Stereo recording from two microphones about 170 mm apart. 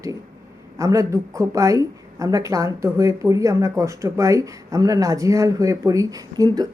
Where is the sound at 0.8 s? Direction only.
20° right (ahead or behind).